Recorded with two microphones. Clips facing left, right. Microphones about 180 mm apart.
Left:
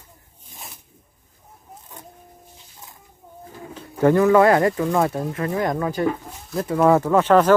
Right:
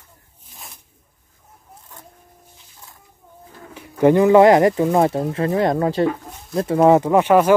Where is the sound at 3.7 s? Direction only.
20° right (ahead or behind).